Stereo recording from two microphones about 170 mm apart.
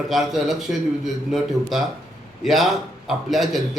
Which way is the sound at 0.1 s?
Centre (ahead or behind).